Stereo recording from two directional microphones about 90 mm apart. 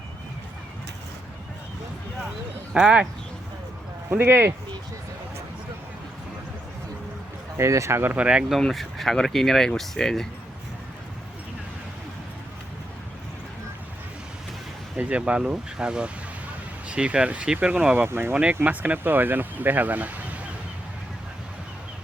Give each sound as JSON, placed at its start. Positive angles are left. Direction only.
{"t": 2.7, "sound": "speech", "side_deg": -10}
{"t": 4.1, "sound": "speech", "side_deg": -25}
{"t": 7.5, "sound": "speech", "side_deg": -35}
{"t": 8.1, "sound": "speech", "side_deg": -10}
{"t": 8.5, "sound": "speech", "side_deg": 0}
{"t": 14.9, "sound": "speech", "side_deg": -15}